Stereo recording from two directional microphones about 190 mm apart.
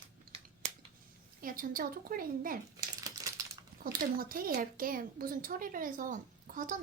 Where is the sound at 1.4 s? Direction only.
50° right (ahead or behind).